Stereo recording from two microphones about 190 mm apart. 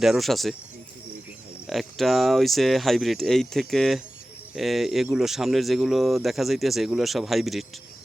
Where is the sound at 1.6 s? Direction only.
Centre (ahead or behind).